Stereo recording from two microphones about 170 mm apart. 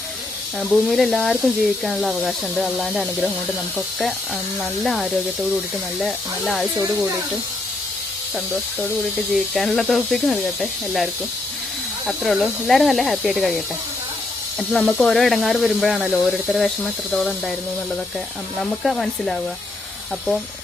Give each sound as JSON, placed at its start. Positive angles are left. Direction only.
{"t": 0.6, "sound": "speech", "side_deg": 0}
{"t": 4.8, "sound": "speech", "side_deg": 0}
{"t": 9.3, "sound": "speech", "side_deg": 0}
{"t": 14.7, "sound": "speech", "side_deg": 5}
{"t": 18.6, "sound": "speech", "side_deg": 0}